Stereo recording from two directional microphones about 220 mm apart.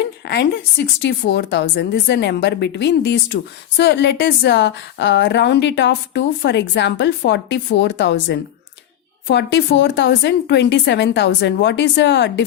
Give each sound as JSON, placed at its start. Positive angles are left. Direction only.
{"t": 0.2, "sound": "a woman's voice", "side_deg": 55}